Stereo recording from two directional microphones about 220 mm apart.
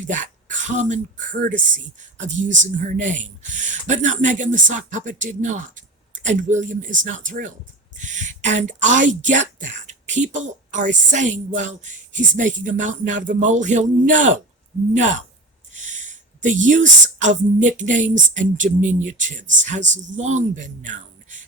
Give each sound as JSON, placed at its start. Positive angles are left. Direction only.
{"t": 0.1, "sound": "speech", "side_deg": -35}